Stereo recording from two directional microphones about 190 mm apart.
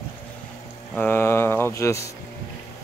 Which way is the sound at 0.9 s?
10° left (ahead or behind).